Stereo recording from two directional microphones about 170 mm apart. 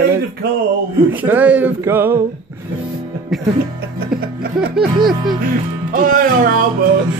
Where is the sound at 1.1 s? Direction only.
10° right (ahead or behind).